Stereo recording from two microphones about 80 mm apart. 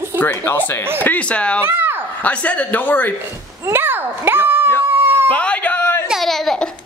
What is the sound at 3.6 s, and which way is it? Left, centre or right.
A child's voice, right.